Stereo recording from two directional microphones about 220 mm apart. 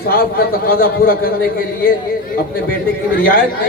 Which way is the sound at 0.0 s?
40° left (ahead or behind).